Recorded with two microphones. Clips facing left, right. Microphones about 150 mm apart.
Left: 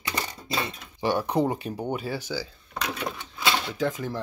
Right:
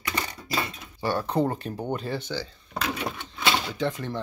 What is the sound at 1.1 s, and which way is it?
Speech, 15° left (ahead or behind).